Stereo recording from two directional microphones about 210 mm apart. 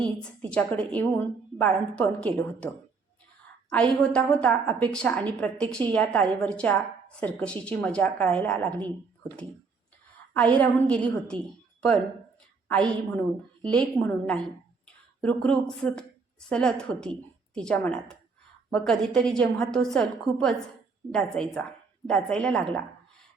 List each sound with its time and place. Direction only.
0.0 s a woman's voice: 5° left (ahead or behind)
10.3 s a woman's voice: 5° left (ahead or behind)
12.6 s a woman's voice: 5° left (ahead or behind)